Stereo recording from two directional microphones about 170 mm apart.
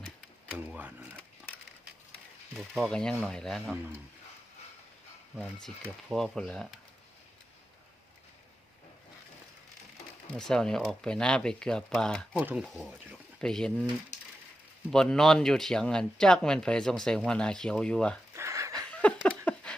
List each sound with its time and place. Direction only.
0.5 s speech: 10° right (ahead or behind)
2.5 s speech: centre (ahead or behind)
5.5 s speech: 5° left (ahead or behind)
10.3 s speech: 5° left (ahead or behind)
12.3 s speech: 5° right (ahead or behind)
14.1 s a sound: 45° left (ahead or behind)
14.8 s speech: 5° left (ahead or behind)
18.3 s a sound: 20° right (ahead or behind)
18.9 s a sound: 10° left (ahead or behind)